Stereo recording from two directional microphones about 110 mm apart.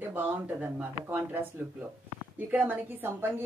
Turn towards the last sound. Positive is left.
turn(degrees=-20)  # may be behind; listen again after turning